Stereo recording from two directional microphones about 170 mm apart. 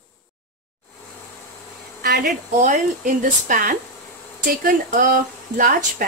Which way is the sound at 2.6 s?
50° right (ahead or behind).